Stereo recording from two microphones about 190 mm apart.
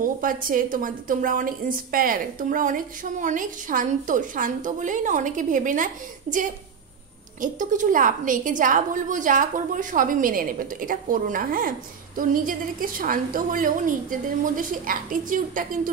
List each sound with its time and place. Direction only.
0.0 s a woman's voice: 45° right (ahead or behind)
7.4 s a woman's voice: 40° right (ahead or behind)